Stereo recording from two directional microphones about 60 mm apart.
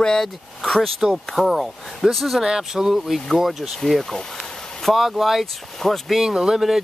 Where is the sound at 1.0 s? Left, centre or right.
Centre.